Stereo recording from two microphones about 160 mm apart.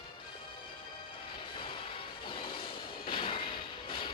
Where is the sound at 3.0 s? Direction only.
30° left (ahead or behind).